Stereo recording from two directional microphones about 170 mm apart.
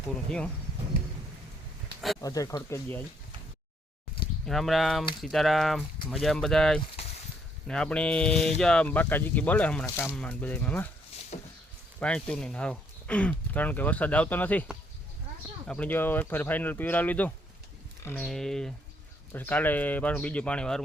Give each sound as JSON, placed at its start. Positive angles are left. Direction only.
{"t": 0.3, "sound": "speech", "side_deg": 5}
{"t": 2.2, "sound": "speech", "side_deg": 20}
{"t": 4.4, "sound": "speech", "side_deg": 0}
{"t": 11.3, "sound": "a sound", "side_deg": 45}
{"t": 11.9, "sound": "speech", "side_deg": 5}
{"t": 15.6, "sound": "speech", "side_deg": 5}